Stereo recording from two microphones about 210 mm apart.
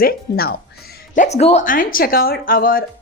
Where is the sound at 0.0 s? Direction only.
45° left (ahead or behind).